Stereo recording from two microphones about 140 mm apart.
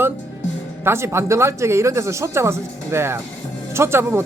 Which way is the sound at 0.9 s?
20° right (ahead or behind).